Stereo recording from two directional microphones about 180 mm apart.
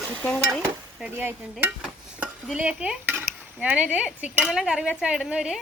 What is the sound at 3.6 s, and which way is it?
Speech, 10° right (ahead or behind).